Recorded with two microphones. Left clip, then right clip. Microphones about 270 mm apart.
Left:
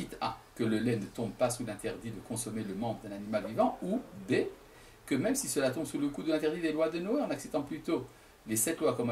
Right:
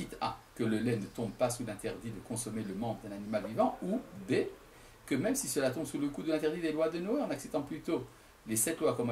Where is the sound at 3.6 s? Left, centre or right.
Right.